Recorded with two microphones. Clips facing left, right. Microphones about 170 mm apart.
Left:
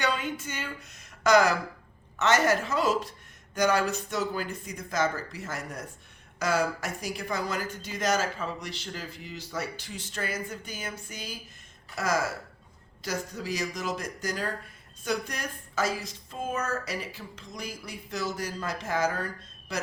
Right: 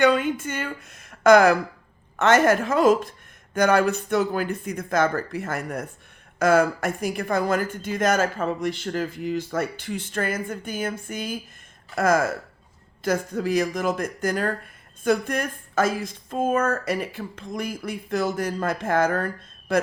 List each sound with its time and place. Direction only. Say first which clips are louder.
0.0 s a woman's voice: right 10 dB; 55° right (ahead or behind)